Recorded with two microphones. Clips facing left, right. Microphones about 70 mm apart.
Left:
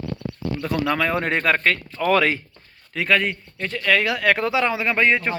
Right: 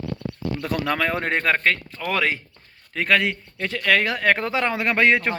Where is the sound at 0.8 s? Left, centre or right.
Right.